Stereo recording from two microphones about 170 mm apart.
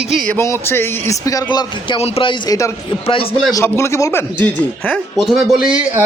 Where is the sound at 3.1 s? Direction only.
30° left (ahead or behind).